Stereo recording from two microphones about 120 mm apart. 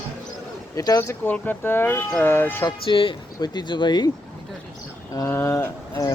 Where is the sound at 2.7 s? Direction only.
45° left (ahead or behind).